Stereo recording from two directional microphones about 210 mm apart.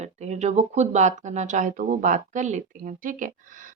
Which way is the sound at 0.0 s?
30° right (ahead or behind).